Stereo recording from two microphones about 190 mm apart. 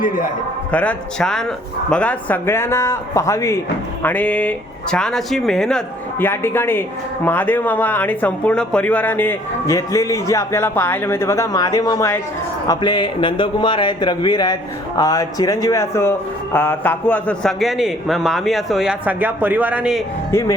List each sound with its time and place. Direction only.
0.7 s a man's voice: 5° left (ahead or behind)
20.3 s a man's voice: 15° left (ahead or behind)